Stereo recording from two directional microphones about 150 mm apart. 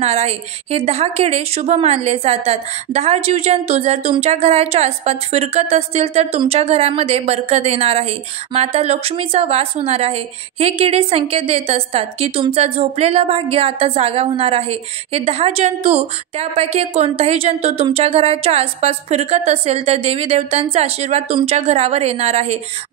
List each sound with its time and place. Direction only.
0.0 s a woman's voice: 45° right (ahead or behind)